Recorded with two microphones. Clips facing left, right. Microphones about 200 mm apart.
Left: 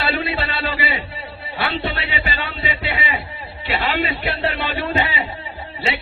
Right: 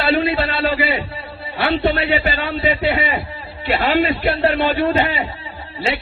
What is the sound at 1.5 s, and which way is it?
A man's voice, 50° right (ahead or behind).